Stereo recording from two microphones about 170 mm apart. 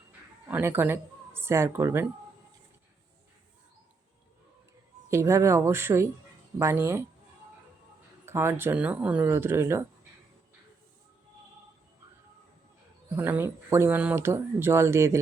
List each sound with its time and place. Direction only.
0.4 s speech: 10° right (ahead or behind)
5.0 s speech: 15° right (ahead or behind)
8.2 s speech: 15° right (ahead or behind)
13.1 s speech: 15° right (ahead or behind)